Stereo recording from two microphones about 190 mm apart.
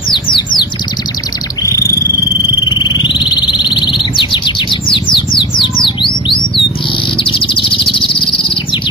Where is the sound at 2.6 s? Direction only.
25° left (ahead or behind).